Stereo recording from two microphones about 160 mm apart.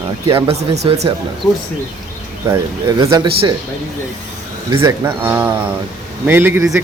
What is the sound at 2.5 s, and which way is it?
Speech, 20° right (ahead or behind).